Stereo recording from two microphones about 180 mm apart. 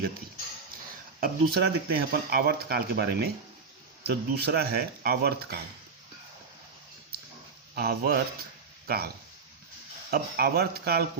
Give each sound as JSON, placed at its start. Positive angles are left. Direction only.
{"t": 1.2, "sound": "speech", "side_deg": -60}
{"t": 7.8, "sound": "speech", "side_deg": -60}
{"t": 10.1, "sound": "speech", "side_deg": -55}